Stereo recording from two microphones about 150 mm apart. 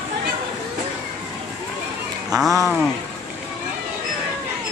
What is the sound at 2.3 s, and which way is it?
Speech, centre (ahead or behind).